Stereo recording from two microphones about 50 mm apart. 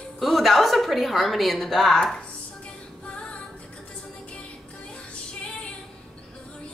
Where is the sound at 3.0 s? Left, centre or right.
Left.